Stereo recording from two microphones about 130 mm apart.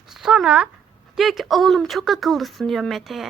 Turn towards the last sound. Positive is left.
turn(degrees=0)  # may be behind; listen again after turning